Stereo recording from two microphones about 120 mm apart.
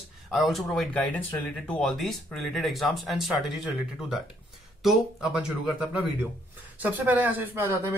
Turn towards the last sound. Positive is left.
turn(degrees=-20)  # may be behind; listen again after turning